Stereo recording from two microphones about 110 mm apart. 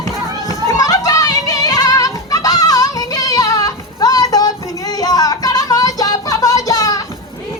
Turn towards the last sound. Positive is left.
turn(degrees=35)  # may be behind; listen again after turning